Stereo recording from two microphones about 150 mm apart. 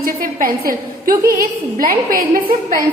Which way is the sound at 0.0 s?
65° right (ahead or behind).